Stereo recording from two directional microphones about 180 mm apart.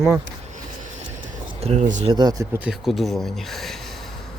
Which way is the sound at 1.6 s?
40° right (ahead or behind).